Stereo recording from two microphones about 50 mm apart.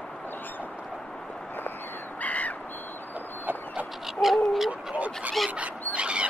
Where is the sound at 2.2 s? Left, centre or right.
Left.